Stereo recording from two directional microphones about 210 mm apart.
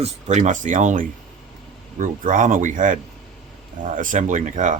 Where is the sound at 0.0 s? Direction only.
35° right (ahead or behind).